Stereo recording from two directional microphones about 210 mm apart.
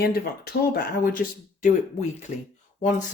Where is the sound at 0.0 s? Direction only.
45° left (ahead or behind).